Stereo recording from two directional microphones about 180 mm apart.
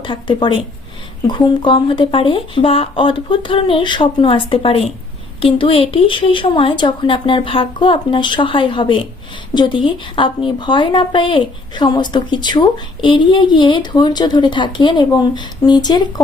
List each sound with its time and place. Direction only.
0.0 s a woman's voice: 25° left (ahead or behind)